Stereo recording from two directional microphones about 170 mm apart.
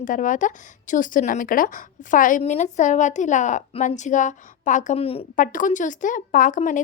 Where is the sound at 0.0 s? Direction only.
50° left (ahead or behind); by 5.2 s 35° left (ahead or behind).